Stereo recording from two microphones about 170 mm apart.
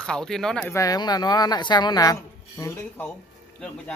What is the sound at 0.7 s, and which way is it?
Speech, 20° left (ahead or behind).